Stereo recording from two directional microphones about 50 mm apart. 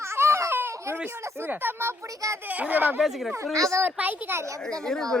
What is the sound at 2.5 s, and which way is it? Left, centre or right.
Speech, right.